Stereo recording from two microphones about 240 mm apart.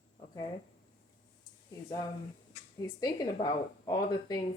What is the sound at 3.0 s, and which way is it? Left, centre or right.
Speech, centre.